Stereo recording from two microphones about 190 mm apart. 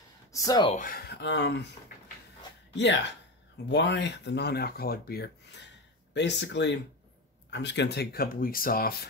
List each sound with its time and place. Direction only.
0.3 s speech: 15° left (ahead or behind)
0.7 s speech: 45° left (ahead or behind); by 1.7 s 65° left (ahead or behind)
2.7 s speech: 65° left (ahead or behind)
6.1 s speech: 65° left (ahead or behind); by 9.0 s 50° left (ahead or behind)